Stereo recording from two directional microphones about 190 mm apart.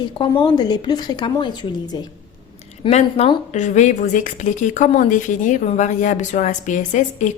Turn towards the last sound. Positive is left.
turn(degrees=40)  # may be behind; listen again after turning